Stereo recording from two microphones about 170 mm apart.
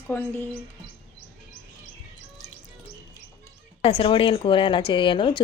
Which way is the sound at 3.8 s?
30° left (ahead or behind).